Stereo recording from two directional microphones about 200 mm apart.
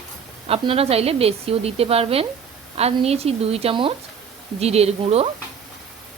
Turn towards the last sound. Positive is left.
turn(degrees=-30)  # may be behind; listen again after turning